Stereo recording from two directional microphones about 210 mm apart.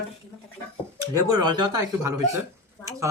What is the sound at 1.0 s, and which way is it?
Speech, 15° right (ahead or behind).